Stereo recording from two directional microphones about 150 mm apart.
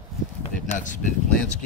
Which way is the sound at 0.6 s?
55° left (ahead or behind).